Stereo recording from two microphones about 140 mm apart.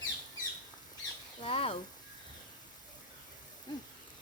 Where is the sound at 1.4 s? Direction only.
45° left (ahead or behind).